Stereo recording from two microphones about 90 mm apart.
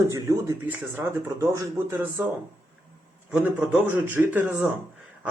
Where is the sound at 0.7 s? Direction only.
30° right (ahead or behind).